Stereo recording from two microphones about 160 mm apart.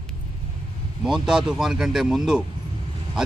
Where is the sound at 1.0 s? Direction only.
5° right (ahead or behind).